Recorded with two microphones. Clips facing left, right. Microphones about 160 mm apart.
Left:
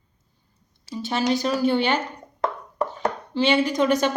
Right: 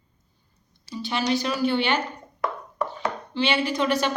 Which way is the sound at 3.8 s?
45° left (ahead or behind).